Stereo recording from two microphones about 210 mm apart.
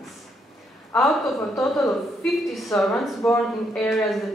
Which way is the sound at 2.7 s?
15° left (ahead or behind).